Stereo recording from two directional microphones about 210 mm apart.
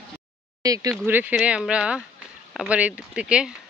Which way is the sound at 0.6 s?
15° right (ahead or behind).